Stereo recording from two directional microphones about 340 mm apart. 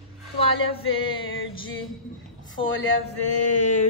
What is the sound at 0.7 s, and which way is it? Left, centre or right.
A woman's voice, centre.